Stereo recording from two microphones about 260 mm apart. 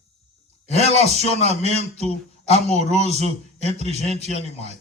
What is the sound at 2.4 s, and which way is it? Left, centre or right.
A man's voice, left.